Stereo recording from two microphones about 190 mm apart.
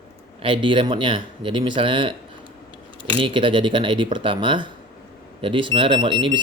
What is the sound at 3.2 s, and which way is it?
Speech, 25° right (ahead or behind).